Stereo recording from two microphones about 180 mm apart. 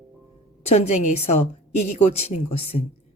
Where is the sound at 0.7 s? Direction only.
35° left (ahead or behind).